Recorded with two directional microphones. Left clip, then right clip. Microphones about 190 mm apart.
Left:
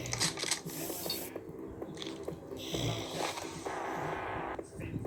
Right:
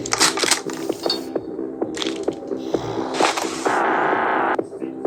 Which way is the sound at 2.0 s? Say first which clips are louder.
Right 17 dB; 40° right (ahead or behind).